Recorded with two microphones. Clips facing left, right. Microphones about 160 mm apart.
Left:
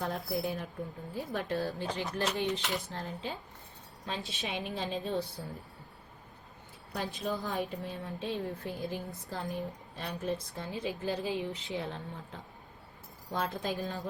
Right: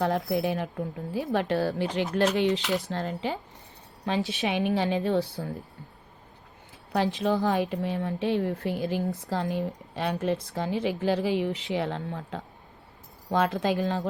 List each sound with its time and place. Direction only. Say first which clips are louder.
0.3 s speech: right 7 dB; 85° right
6.9 s speech: right 10 dB; 90° right